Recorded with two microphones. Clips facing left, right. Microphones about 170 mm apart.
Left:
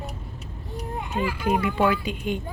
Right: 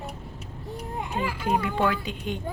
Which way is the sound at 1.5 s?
10° left (ahead or behind).